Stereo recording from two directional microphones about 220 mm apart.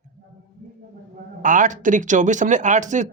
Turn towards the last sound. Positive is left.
turn(degrees=-35)  # may be behind; listen again after turning